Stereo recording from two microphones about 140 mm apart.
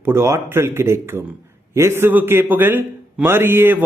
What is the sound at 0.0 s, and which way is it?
A man's voice, 15° right (ahead or behind).